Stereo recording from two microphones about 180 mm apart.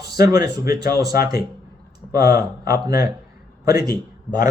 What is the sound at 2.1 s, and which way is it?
Speech, 20° right (ahead or behind).